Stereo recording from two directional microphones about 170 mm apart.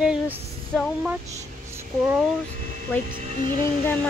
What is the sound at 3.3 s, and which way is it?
Speech, 30° right (ahead or behind).